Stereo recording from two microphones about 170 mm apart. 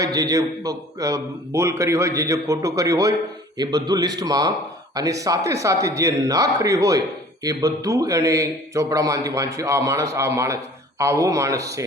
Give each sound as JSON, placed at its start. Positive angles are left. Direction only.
{"t": 0.0, "sound": "a man's voice", "side_deg": -20}